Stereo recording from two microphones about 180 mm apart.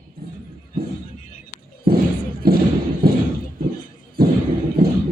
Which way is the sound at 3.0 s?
55° right (ahead or behind).